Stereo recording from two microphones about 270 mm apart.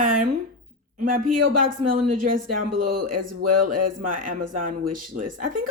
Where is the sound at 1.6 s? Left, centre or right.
Right.